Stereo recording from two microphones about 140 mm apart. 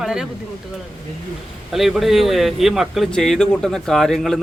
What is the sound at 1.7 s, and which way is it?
Speech, centre (ahead or behind).